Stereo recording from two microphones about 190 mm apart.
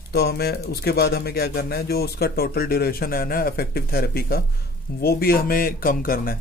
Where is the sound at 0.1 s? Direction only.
55° left (ahead or behind).